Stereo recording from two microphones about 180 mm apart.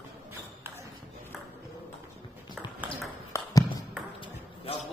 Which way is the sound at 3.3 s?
15° left (ahead or behind).